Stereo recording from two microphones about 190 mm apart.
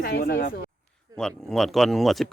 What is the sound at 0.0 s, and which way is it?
Speech, 50° left (ahead or behind).